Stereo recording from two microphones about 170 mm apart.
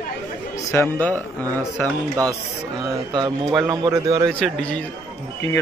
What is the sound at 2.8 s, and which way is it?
Speech, 25° right (ahead or behind).